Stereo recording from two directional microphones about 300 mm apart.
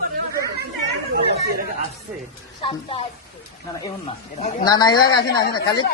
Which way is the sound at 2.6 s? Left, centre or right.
Centre.